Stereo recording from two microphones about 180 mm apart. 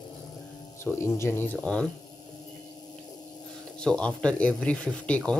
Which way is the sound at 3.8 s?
5° left (ahead or behind).